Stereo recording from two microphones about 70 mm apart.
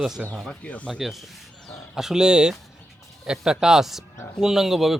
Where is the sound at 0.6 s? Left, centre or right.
Centre.